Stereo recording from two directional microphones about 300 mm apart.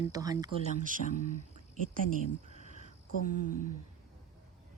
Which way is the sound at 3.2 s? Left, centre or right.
Left.